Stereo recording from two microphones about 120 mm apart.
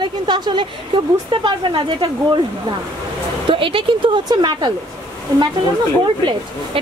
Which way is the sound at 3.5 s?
45° right (ahead or behind).